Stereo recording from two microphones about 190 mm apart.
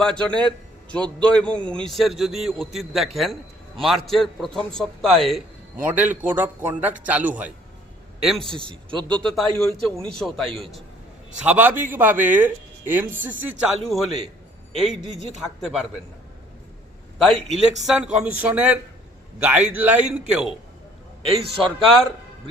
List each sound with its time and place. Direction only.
0.0 s a man's voice: 5° left (ahead or behind)
5.7 s a man's voice: 10° right (ahead or behind)
8.5 s a man's voice: 25° right (ahead or behind)
9.0 s a man's voice: 5° left (ahead or behind)
17.2 s a man's voice: centre (ahead or behind)
21.6 s a man's voice: centre (ahead or behind)